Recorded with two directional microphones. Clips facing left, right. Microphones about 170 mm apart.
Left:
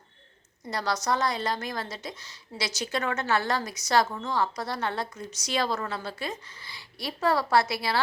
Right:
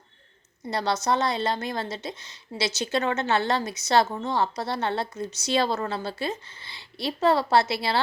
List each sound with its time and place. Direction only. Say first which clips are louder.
0.7 s a woman's voice: right 3 dB; 25° right (ahead or behind)